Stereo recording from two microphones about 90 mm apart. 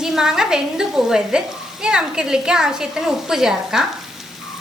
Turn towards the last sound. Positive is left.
turn(degrees=-5)  # may be behind; listen again after turning